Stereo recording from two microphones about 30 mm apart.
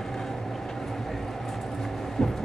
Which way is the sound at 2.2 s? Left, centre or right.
Centre.